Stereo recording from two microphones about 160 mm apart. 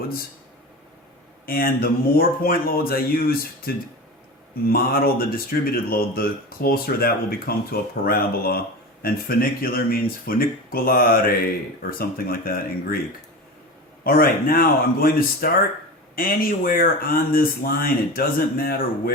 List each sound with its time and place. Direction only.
1.5 s speech: 65° left (ahead or behind)
14.0 s speech: 65° left (ahead or behind)